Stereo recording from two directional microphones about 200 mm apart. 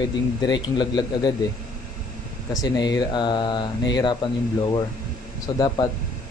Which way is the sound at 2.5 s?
20° left (ahead or behind).